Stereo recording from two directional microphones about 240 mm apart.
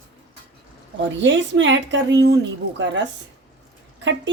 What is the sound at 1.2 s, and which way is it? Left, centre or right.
Speech, right.